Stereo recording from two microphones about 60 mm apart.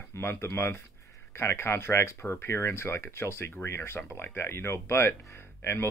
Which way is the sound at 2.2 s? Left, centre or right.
Left.